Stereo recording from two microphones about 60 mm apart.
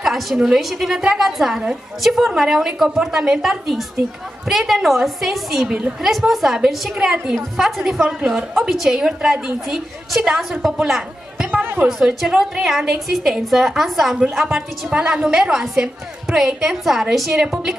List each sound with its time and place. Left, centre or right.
0.0 s a woman's voice: centre
5.7 s a woman's voice: right
6.0 s a woman's voice: centre
11.6 s music: right
12.3 s a woman's voice: centre